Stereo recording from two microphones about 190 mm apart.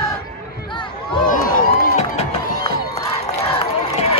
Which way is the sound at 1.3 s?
45° left (ahead or behind).